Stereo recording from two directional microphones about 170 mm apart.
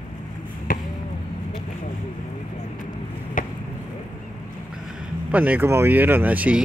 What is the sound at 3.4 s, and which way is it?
Chop, 50° left (ahead or behind).